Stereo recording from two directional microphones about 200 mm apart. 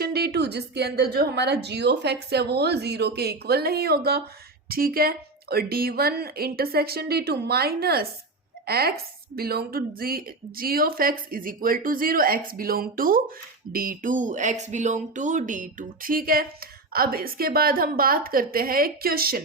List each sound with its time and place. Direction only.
0.0 s speech: 50° right (ahead or behind)